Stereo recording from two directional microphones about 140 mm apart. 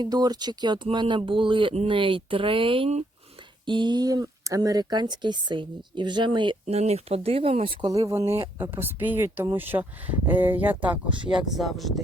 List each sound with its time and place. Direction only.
0.0 s speech: 30° right (ahead or behind)
6.7 s speech: 50° right (ahead or behind); by 10.8 s 15° right (ahead or behind)
11.3 s speech: centre (ahead or behind)